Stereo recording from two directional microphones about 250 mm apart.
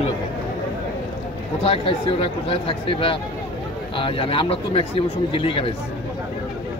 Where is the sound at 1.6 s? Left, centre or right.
Left.